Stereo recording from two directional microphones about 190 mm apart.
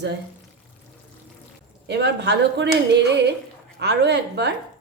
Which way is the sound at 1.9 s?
65° right (ahead or behind).